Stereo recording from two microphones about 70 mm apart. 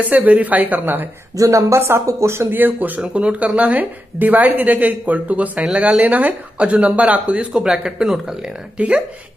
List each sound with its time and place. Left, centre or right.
0.0 s speech: right
1.3 s speech: right
3.0 s speech: centre